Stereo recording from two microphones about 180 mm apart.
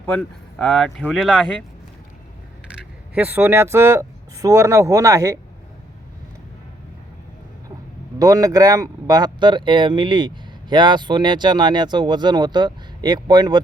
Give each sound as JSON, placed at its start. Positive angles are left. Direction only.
{"t": 0.0, "sound": "speech", "side_deg": 10}
{"t": 3.2, "sound": "speech", "side_deg": -10}
{"t": 8.2, "sound": "speech", "side_deg": -20}